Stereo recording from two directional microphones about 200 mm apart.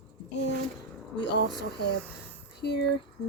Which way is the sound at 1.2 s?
60° left (ahead or behind).